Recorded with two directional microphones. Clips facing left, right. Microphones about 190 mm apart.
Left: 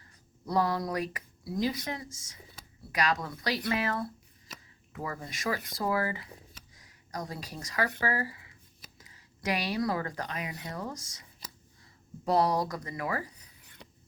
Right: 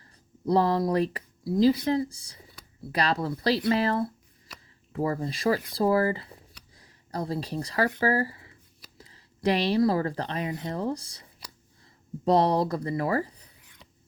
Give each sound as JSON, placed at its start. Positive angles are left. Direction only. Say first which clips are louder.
{"t": 0.4, "sound": "a woman's voice", "louder": "right 6 dB", "side_deg": -30}